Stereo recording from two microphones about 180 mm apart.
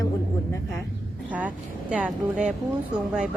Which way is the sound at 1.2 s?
10° right (ahead or behind).